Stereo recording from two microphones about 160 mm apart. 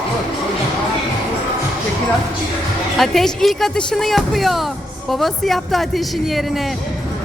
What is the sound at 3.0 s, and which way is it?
Speech, centre (ahead or behind).